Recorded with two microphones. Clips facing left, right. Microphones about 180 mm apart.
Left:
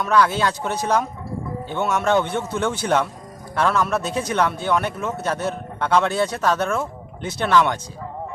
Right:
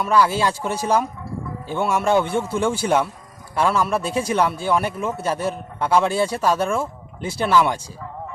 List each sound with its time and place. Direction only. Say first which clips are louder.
0.0 s speech: even; 10° right (ahead or behind)